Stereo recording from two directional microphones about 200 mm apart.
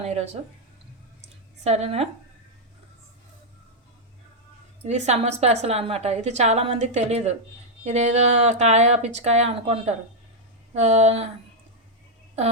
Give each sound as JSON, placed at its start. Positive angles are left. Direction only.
{"t": 0.0, "sound": "a woman's voice", "side_deg": -35}
{"t": 1.6, "sound": "a woman's voice", "side_deg": -30}
{"t": 4.8, "sound": "a woman's voice", "side_deg": -35}